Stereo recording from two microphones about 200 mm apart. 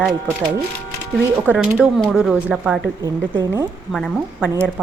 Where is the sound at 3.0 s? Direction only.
20° right (ahead or behind).